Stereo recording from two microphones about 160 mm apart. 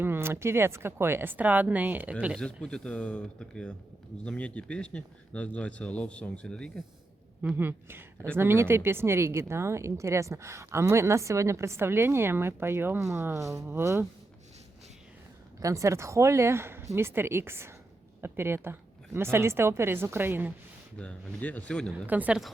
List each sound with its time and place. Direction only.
0.0 s speech: 15° right (ahead or behind)
2.4 s speech: 5° left (ahead or behind)
7.5 s speech: 15° right (ahead or behind)
15.6 s speech: 20° right (ahead or behind)
21.0 s speech: 10° left (ahead or behind)
21.9 s speech: 10° right (ahead or behind)